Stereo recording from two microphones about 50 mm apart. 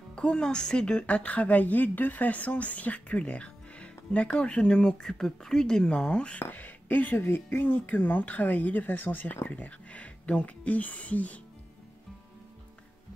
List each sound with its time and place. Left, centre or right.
0.1 s a woman's voice: centre
6.4 s speech: left
9.5 s speech: left